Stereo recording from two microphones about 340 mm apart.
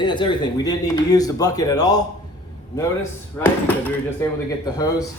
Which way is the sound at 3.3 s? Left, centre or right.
Centre.